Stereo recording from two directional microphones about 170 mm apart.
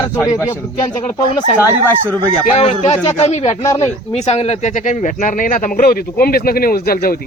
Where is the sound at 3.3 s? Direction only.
40° left (ahead or behind).